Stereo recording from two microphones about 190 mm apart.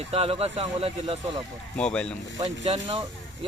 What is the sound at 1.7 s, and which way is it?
Speech, 5° left (ahead or behind).